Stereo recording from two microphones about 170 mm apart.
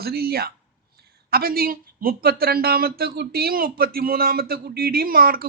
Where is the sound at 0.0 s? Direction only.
65° right (ahead or behind).